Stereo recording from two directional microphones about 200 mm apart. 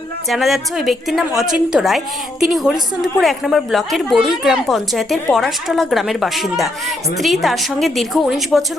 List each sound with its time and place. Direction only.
0.3 s a woman's voice: centre (ahead or behind)